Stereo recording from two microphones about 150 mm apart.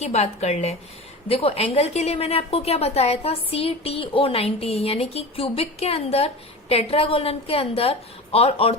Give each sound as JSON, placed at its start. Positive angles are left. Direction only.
{"t": 0.0, "sound": "a woman's voice", "side_deg": 45}